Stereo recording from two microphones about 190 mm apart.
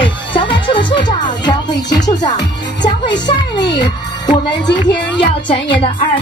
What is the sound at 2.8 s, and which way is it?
Music, 25° left (ahead or behind).